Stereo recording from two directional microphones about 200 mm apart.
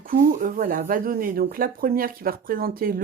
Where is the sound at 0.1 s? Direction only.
45° right (ahead or behind).